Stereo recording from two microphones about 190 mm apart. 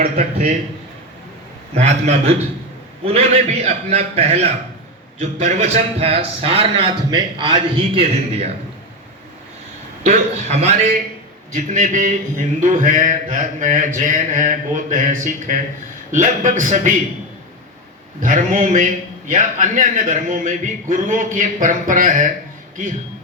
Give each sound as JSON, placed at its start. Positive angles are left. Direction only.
{"t": 0.0, "sound": "a man's voice", "side_deg": -35}
{"t": 1.7, "sound": "a man's voice", "side_deg": -35}
{"t": 10.0, "sound": "a man's voice", "side_deg": -35}
{"t": 18.2, "sound": "a man's voice", "side_deg": -40}